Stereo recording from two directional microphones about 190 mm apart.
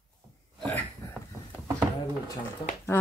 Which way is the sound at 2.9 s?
10° left (ahead or behind).